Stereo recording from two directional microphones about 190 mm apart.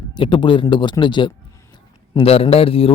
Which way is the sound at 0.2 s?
25° left (ahead or behind).